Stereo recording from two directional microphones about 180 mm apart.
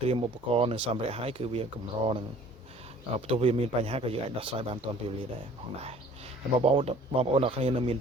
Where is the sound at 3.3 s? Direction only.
30° right (ahead or behind).